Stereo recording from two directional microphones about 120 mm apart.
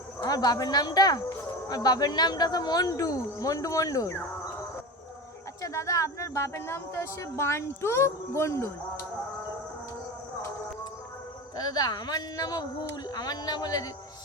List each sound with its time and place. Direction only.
0.2 s speech: 35° left (ahead or behind)
5.6 s speech: 25° left (ahead or behind)
11.5 s speech: 35° left (ahead or behind)